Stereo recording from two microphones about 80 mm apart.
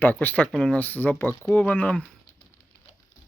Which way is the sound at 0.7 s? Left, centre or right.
Left.